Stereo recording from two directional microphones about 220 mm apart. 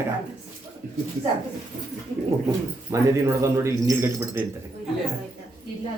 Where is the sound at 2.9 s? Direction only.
15° right (ahead or behind).